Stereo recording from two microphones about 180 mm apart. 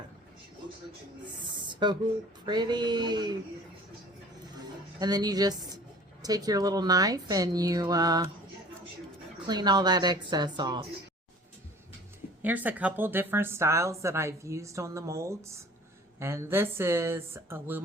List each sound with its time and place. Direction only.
1.6 s a sound: 25° right (ahead or behind)
2.5 s speech: 25° right (ahead or behind)
4.9 s speech: 20° right (ahead or behind)
9.5 s speech: 25° right (ahead or behind)
12.4 s a woman's voice: 10° right (ahead or behind)